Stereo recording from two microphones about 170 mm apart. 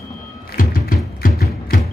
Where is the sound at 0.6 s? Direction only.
55° left (ahead or behind).